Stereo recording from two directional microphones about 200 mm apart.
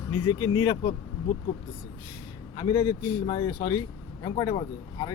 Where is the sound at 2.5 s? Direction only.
20° left (ahead or behind).